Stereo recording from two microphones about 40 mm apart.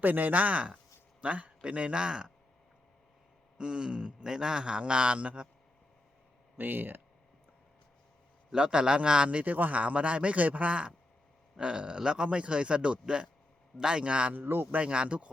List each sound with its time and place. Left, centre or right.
0.0 s a man's voice: right
3.6 s a man's voice: right
6.6 s speech: right
8.5 s a man's voice: right
9.4 s a man's voice: right
14.3 s speech: right
14.8 s a man's voice: right